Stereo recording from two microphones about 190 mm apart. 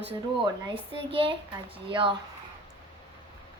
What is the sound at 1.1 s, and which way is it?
A child's voice, 30° right (ahead or behind).